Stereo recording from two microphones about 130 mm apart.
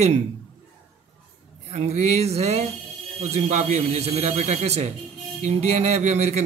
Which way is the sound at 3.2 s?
65° right (ahead or behind).